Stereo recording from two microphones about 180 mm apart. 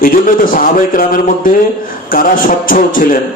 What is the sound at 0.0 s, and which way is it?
A man's voice, 50° left (ahead or behind).